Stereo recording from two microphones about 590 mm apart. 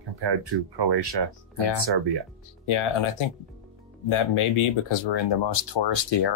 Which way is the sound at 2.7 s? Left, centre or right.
Left.